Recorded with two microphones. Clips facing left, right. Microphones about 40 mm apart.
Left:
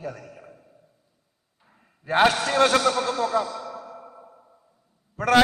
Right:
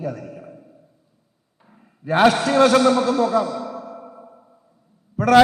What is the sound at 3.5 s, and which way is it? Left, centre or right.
Music, right.